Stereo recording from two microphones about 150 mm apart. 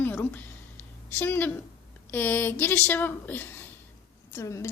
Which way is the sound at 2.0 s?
10° left (ahead or behind).